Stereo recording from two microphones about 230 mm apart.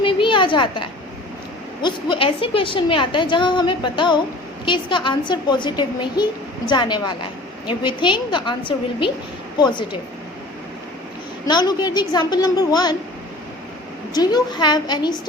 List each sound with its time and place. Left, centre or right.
0.0 s a sound: left
1.8 s a woman's voice: left
11.4 s a woman's voice: centre
14.1 s a woman's voice: centre